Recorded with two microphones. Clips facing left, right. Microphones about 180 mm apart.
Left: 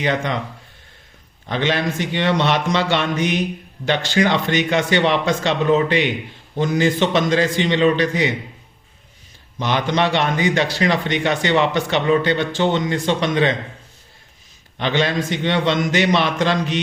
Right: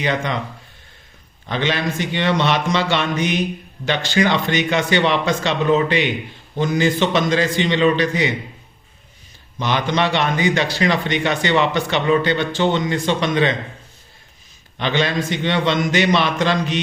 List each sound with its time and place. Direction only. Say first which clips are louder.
0.0 s a man's voice: left 1 dB; 50° left (ahead or behind)
1.5 s a man's voice: left 1 dB; 50° left (ahead or behind)
9.6 s a man's voice: even; 50° left (ahead or behind)
14.8 s a man's voice: even; 45° left (ahead or behind)